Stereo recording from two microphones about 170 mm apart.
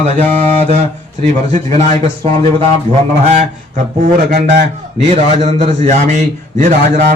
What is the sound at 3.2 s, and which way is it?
A man's voice, 40° right (ahead or behind).